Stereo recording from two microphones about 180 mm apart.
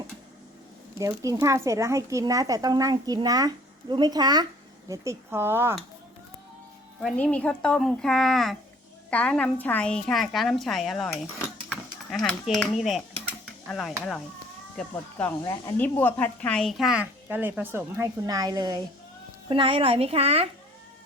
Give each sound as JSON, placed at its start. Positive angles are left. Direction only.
{"t": 0.9, "sound": "speech", "side_deg": -20}
{"t": 7.0, "sound": "speech", "side_deg": 5}
{"t": 14.8, "sound": "a woman's voice", "side_deg": 10}